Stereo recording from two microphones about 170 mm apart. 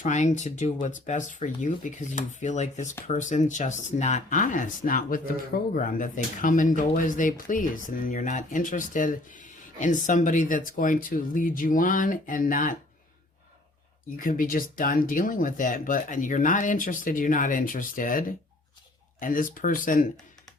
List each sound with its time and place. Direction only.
0.0 s speech: 45° left (ahead or behind)
14.2 s speech: 55° left (ahead or behind)